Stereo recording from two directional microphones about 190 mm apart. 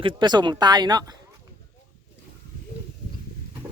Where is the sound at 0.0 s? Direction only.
25° right (ahead or behind).